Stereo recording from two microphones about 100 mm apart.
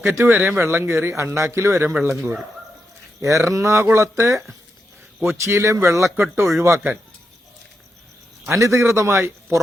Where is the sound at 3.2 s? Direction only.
35° right (ahead or behind).